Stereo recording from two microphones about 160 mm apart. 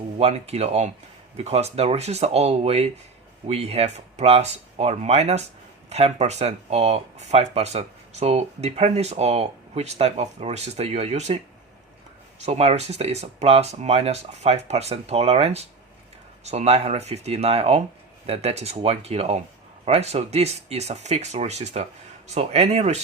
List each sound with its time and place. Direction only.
0.2 s speech: 40° right (ahead or behind)
12.5 s speech: 40° right (ahead or behind)